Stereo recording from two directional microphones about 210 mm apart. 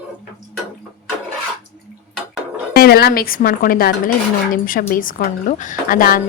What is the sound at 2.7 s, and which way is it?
A woman's voice, 50° left (ahead or behind).